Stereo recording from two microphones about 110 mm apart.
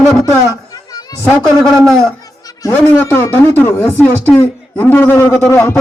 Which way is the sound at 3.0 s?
20° left (ahead or behind).